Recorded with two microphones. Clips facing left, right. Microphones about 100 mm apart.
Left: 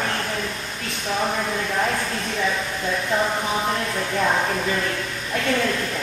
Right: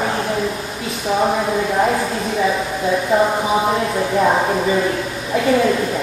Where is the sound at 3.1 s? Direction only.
10° right (ahead or behind).